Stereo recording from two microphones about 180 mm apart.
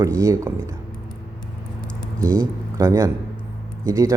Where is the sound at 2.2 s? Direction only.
20° right (ahead or behind).